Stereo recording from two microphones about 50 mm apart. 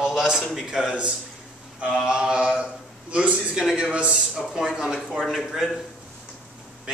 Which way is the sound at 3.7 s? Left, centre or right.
Right.